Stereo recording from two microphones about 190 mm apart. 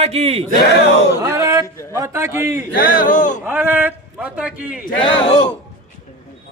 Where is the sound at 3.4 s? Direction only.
10° right (ahead or behind).